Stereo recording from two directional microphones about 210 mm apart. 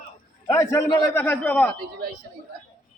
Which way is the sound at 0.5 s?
15° left (ahead or behind).